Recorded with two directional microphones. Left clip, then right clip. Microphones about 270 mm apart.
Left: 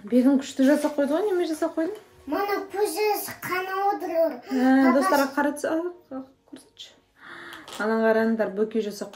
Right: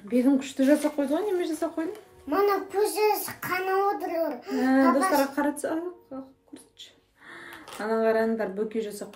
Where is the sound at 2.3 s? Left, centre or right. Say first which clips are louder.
Right 2 dB; centre.